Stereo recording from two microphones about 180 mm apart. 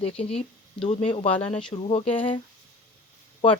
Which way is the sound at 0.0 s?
35° left (ahead or behind).